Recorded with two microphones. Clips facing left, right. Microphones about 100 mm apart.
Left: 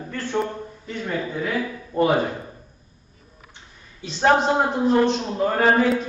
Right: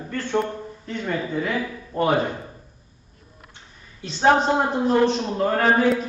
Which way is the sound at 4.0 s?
Centre (ahead or behind).